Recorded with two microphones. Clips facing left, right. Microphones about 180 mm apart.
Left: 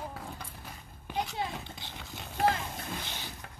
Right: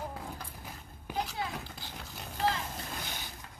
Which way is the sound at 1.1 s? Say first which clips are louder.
Left 1 dB; 5° right (ahead or behind).